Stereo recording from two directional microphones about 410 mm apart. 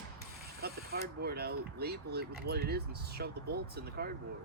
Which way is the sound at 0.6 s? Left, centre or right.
Right.